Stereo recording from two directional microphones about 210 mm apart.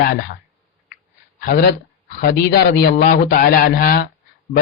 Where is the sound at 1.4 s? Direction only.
45° left (ahead or behind).